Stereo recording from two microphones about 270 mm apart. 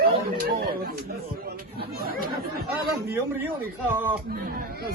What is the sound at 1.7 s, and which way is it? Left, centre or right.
Chatter, right.